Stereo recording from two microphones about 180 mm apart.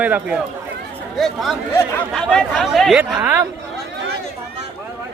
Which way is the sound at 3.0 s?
10° right (ahead or behind).